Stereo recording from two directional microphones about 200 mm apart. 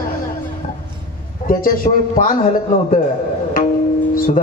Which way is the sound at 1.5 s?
45° left (ahead or behind).